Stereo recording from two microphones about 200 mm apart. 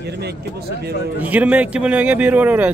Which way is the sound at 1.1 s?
10° right (ahead or behind).